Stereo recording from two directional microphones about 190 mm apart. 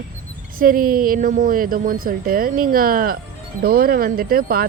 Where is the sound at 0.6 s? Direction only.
50° right (ahead or behind).